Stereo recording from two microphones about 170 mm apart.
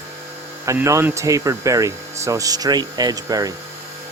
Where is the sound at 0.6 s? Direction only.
20° right (ahead or behind).